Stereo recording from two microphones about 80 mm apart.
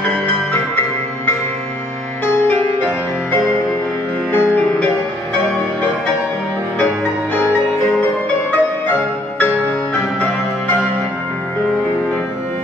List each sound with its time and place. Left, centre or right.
4.3 s music: left
8.5 s music: left